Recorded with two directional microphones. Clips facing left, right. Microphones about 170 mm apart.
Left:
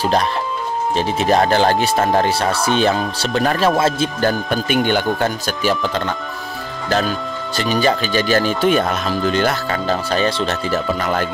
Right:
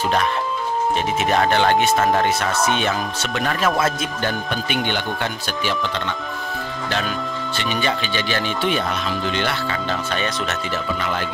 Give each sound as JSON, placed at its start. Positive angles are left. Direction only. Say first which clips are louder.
{"t": 0.9, "sound": "speech", "louder": "left 6 dB", "side_deg": 35}
{"t": 7.5, "sound": "speech", "louder": "left 7 dB", "side_deg": 35}